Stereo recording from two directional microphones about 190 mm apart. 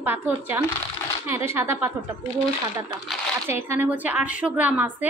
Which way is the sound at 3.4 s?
15° right (ahead or behind).